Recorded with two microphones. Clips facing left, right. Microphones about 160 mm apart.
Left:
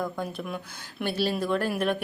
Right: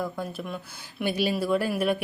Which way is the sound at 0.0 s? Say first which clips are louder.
Even; 5° right (ahead or behind).